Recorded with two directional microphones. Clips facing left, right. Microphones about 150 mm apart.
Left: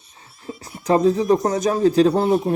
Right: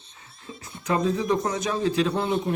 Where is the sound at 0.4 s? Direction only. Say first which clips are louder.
Left 7 dB; 35° left (ahead or behind).